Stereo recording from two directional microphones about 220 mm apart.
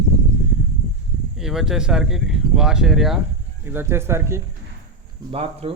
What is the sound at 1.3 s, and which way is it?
Speech, centre (ahead or behind).